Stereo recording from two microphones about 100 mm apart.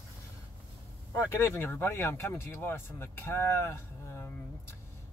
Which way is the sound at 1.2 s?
25° left (ahead or behind).